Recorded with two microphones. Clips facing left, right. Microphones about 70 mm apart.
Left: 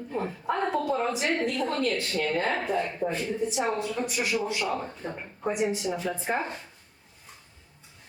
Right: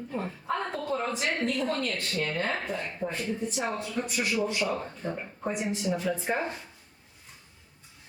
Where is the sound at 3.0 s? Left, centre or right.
Centre.